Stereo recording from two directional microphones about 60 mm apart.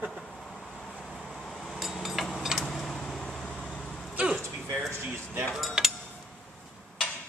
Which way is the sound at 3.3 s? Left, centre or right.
Centre.